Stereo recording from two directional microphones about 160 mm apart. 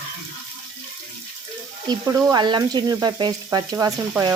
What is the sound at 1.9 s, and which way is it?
Frying, 25° right (ahead or behind).